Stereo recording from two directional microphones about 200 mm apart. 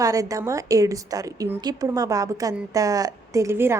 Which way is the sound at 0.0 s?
15° right (ahead or behind).